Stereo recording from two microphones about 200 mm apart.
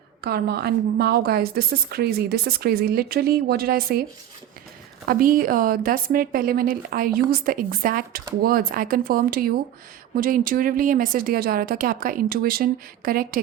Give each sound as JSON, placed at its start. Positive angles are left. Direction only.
{"t": 0.2, "sound": "a woman's voice", "side_deg": -50}
{"t": 5.0, "sound": "a woman's voice", "side_deg": -45}